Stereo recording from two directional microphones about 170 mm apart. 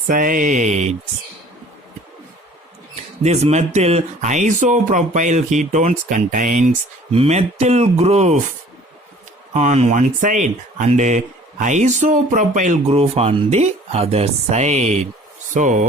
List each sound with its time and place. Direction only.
0.1 s speech: 55° right (ahead or behind)
2.9 s speech: 40° right (ahead or behind)
9.5 s speech: 40° right (ahead or behind)